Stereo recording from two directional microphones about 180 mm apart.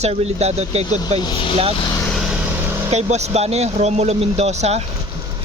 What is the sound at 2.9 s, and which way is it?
A man's voice, 40° right (ahead or behind).